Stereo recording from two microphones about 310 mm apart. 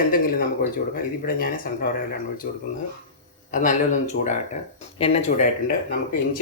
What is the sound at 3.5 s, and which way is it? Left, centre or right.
Speech, left.